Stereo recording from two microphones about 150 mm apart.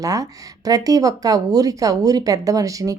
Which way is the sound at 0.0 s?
20° right (ahead or behind).